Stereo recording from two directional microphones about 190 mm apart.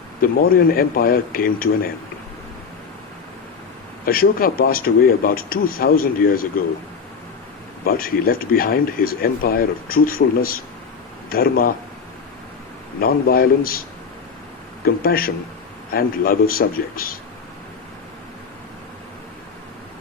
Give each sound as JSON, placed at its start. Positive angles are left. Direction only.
{"t": 0.2, "sound": "speech", "side_deg": 50}
{"t": 4.0, "sound": "speech", "side_deg": 50}
{"t": 7.9, "sound": "speech", "side_deg": 50}
{"t": 13.0, "sound": "speech", "side_deg": 50}
{"t": 14.8, "sound": "a man's voice", "side_deg": 50}